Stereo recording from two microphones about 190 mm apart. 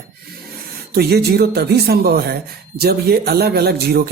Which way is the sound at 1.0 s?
55° right (ahead or behind).